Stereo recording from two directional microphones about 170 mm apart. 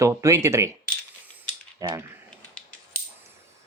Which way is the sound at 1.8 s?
20° right (ahead or behind).